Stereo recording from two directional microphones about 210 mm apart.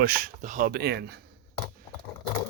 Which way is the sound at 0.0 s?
45° right (ahead or behind).